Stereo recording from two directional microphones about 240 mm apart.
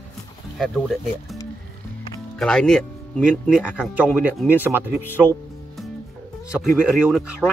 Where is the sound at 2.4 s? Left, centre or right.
Centre.